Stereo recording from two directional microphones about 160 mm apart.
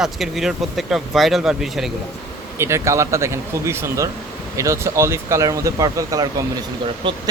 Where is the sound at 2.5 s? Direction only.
15° right (ahead or behind).